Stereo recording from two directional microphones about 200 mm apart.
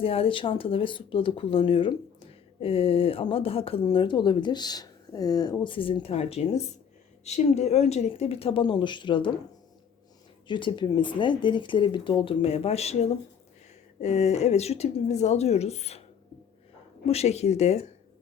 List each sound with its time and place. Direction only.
0.0 s speech: 30° left (ahead or behind)
10.5 s speech: 25° left (ahead or behind)
17.1 s speech: 30° left (ahead or behind)